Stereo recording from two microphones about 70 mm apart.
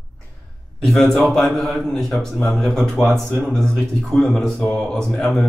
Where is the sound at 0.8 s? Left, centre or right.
Centre.